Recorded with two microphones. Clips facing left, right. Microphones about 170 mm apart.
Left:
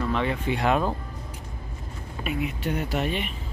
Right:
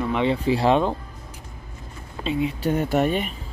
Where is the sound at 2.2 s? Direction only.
25° right (ahead or behind).